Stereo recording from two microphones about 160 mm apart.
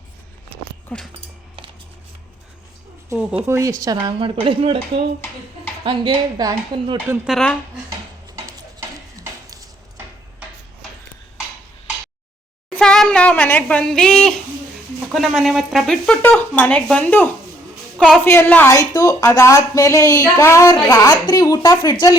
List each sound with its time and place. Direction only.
0.9 s speech: 5° left (ahead or behind)
3.1 s a woman's voice: 20° right (ahead or behind)
4.4 s speech: 35° right (ahead or behind)
5.8 s speech: 30° right (ahead or behind)
7.3 s speech: 5° left (ahead or behind)
9.1 s a sound: 20° right (ahead or behind)
12.7 s a sound: 5° left (ahead or behind)
15.1 s speech: centre (ahead or behind)
17.9 s a sound: 5° left (ahead or behind)
18.3 s a woman's voice: 15° left (ahead or behind)